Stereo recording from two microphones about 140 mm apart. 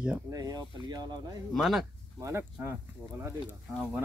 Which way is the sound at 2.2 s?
15° right (ahead or behind).